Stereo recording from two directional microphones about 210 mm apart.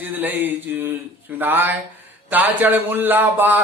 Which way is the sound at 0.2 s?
10° right (ahead or behind).